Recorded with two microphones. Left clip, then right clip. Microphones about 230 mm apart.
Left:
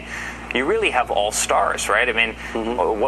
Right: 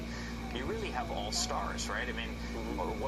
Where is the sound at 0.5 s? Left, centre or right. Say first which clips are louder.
Left 19 dB; left.